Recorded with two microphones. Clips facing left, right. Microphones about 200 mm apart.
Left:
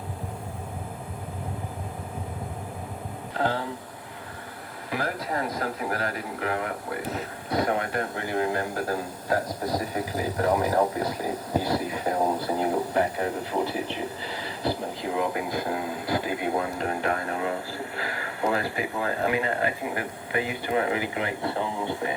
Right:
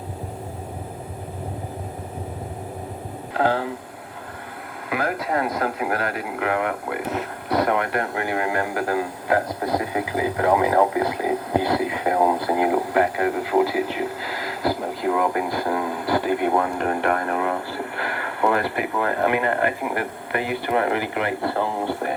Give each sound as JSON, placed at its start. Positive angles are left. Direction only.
{"t": 3.3, "sound": "speech", "side_deg": -60}
{"t": 4.9, "sound": "speech", "side_deg": -65}